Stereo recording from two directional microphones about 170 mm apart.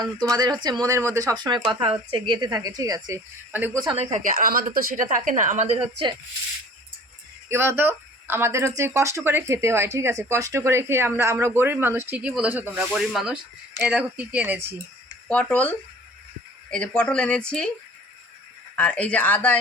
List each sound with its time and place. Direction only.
0.0 s speech: 25° right (ahead or behind)
3.5 s speech: 10° right (ahead or behind)
3.9 s speech: 40° right (ahead or behind)
7.5 s speech: 15° right (ahead or behind)
15.3 s a woman's voice: 5° left (ahead or behind)
18.8 s a woman's voice: 10° left (ahead or behind)